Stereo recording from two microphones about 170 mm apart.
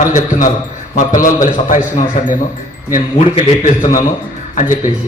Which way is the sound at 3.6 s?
50° left (ahead or behind).